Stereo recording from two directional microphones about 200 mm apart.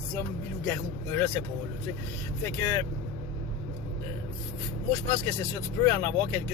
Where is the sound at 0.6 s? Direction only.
10° left (ahead or behind).